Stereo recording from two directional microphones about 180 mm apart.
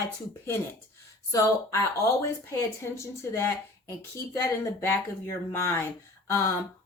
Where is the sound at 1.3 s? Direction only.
15° left (ahead or behind).